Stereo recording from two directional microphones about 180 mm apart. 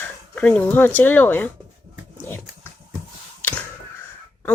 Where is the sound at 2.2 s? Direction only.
10° left (ahead or behind).